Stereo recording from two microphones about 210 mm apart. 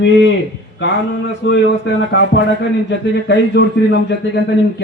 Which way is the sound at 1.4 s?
60° left (ahead or behind).